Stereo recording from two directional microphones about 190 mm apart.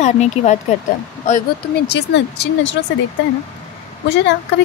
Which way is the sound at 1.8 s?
60° left (ahead or behind).